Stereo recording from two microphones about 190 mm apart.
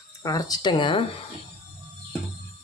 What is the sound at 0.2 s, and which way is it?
Speech, 20° left (ahead or behind).